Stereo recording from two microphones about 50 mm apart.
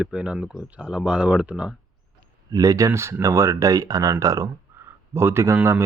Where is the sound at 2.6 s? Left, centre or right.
Right.